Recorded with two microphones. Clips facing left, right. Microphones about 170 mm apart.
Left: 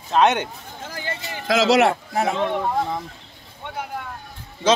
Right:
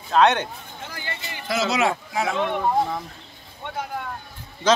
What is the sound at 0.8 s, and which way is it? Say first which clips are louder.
Speech: left 4 dB; 40° left (ahead or behind).